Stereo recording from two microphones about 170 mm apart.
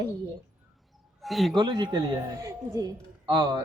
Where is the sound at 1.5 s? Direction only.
25° right (ahead or behind).